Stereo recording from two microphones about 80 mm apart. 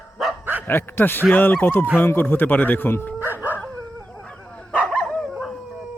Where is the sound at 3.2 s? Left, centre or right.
Right.